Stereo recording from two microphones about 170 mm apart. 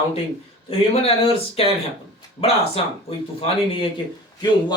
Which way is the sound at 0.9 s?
35° left (ahead or behind).